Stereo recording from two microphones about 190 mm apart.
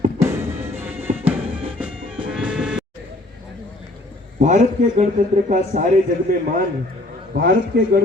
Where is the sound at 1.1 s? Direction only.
40° right (ahead or behind).